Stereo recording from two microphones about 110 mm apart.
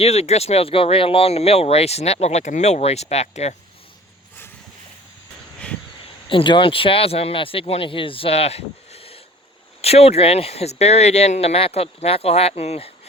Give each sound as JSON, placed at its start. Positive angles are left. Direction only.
{"t": 0.0, "sound": "speech", "side_deg": 75}
{"t": 6.2, "sound": "speech", "side_deg": 50}